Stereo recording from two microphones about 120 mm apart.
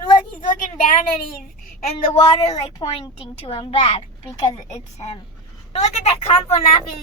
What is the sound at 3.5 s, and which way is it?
Speech, 50° left (ahead or behind).